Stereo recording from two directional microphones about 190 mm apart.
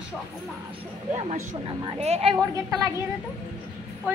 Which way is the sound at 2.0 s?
35° right (ahead or behind).